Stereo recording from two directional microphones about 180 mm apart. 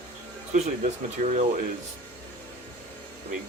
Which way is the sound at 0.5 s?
40° right (ahead or behind).